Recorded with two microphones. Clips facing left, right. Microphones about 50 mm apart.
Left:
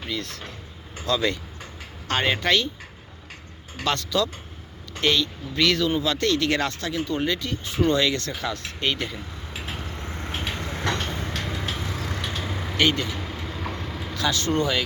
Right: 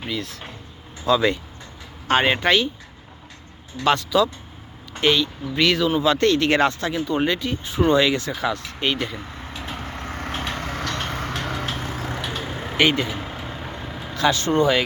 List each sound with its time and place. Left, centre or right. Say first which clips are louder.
0.1 s speech: right 1 dB; centre
3.8 s speech: right 6 dB; centre
6.0 s speech: right 5 dB; right; by 9.2 s centre
9.5 s vehicle: right 1 dB; centre
10.0 s vehicle: right 4 dB; right
11.8 s vehicle: right 2 dB; right
12.2 s vehicle: right 2 dB; centre
14.2 s speech: right 5 dB; right